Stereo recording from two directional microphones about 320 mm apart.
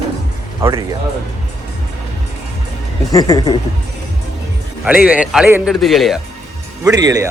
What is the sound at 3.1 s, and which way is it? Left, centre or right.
Speech, centre.